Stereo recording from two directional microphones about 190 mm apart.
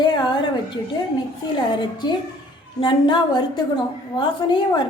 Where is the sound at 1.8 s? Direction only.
25° left (ahead or behind).